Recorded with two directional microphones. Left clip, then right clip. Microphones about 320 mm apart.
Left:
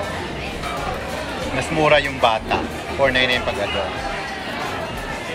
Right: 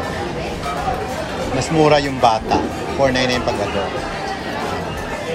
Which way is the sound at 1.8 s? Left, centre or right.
Centre.